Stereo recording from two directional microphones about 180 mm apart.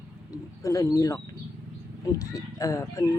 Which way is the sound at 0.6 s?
20° left (ahead or behind).